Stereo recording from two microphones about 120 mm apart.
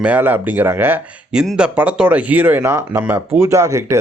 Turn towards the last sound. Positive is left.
turn(degrees=-25)  # may be behind; listen again after turning